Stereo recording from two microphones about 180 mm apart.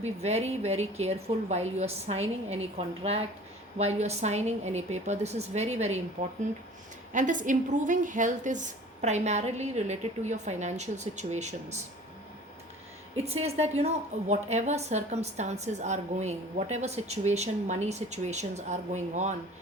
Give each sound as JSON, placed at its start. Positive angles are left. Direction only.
{"t": 0.0, "sound": "a woman's voice", "side_deg": -35}
{"t": 13.2, "sound": "a woman's voice", "side_deg": -35}